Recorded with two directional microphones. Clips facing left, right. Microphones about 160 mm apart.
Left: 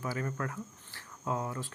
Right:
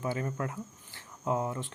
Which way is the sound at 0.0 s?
20° right (ahead or behind).